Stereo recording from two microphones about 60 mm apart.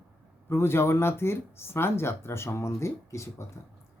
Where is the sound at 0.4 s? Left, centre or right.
Left.